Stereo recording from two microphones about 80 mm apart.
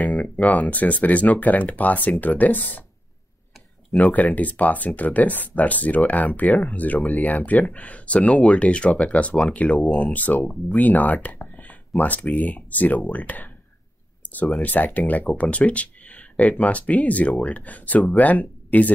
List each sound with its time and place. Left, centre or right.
0.0 s speech: centre
3.9 s speech: centre
10.4 s speech: centre
10.8 s speech: left
14.6 s speech: left